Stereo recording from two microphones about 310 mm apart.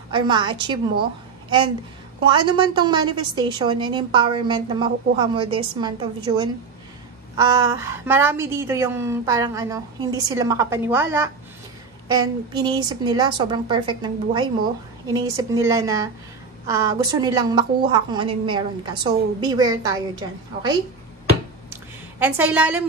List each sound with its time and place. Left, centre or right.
0.1 s a woman's voice: centre
2.2 s a woman's voice: centre
22.2 s a woman's voice: centre